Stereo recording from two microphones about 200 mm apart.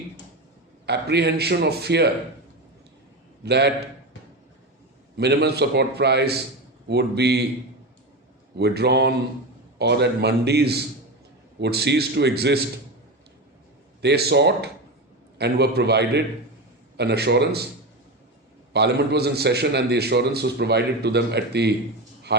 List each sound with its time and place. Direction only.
0.9 s a man's voice: 55° right (ahead or behind)
3.4 s a man's voice: 55° right (ahead or behind)
5.1 s a man's voice: 55° right (ahead or behind)
8.5 s a man's voice: 55° right (ahead or behind)
14.0 s a man's voice: 55° right (ahead or behind)
18.7 s a man's voice: 55° right (ahead or behind)